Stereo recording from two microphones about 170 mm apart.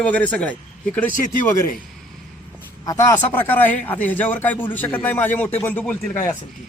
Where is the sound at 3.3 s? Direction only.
10° left (ahead or behind).